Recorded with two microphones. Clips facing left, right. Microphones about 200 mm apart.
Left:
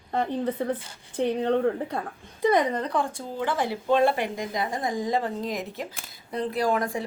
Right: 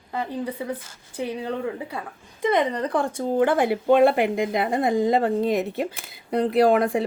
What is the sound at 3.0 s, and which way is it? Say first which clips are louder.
Speech: right 7 dB; 60° right (ahead or behind).